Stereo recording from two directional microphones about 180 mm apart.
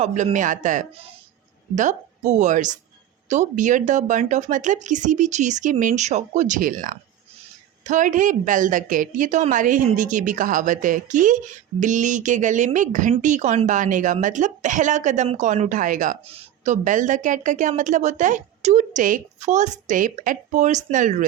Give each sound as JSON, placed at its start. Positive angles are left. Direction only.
{"t": 0.0, "sound": "speech", "side_deg": -40}
{"t": 16.2, "sound": "speech", "side_deg": -35}